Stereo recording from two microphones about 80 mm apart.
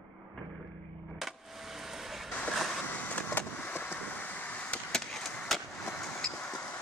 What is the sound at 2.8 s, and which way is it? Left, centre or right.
Vehicle, centre.